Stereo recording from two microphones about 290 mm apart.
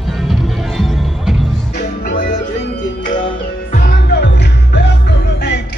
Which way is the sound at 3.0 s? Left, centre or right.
Left.